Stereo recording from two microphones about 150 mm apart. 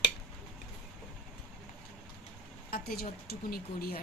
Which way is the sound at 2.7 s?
90° left.